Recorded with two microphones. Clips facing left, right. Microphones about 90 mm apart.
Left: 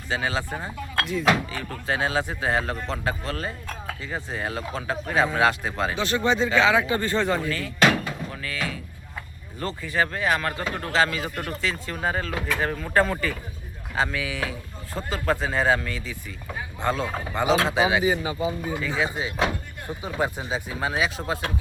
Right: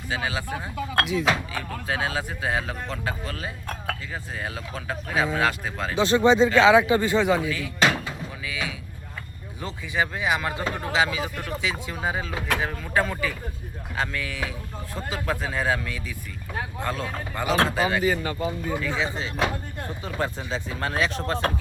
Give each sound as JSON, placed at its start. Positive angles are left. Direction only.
{"t": 0.1, "sound": "speech", "side_deg": -5}
{"t": 6.0, "sound": "speech", "side_deg": -25}
{"t": 18.0, "sound": "speech", "side_deg": 15}
{"t": 18.8, "sound": "speech", "side_deg": 0}
{"t": 19.0, "sound": "speech", "side_deg": 10}